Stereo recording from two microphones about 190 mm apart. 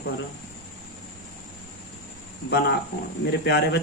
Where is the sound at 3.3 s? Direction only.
60° left (ahead or behind).